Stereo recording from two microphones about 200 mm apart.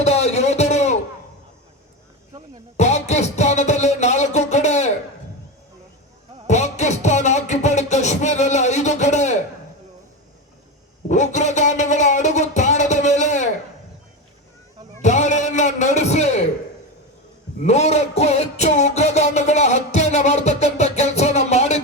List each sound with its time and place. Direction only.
0.0 s a sound: 30° left (ahead or behind)
2.7 s music: 35° left (ahead or behind)
6.5 s music: 35° left (ahead or behind)
11.1 s a sound: 35° left (ahead or behind)
15.0 s music: 35° left (ahead or behind)
17.7 s music: 35° left (ahead or behind)